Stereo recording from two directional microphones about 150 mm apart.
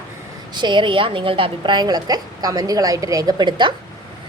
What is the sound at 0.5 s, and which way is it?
A woman's voice, 30° right (ahead or behind).